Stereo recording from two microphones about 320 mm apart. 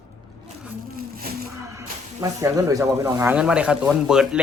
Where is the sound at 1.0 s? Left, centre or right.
Right.